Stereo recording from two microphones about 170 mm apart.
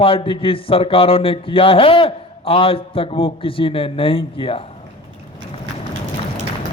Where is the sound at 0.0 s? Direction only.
30° left (ahead or behind).